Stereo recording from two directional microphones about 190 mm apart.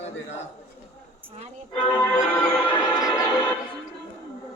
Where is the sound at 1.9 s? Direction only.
10° left (ahead or behind).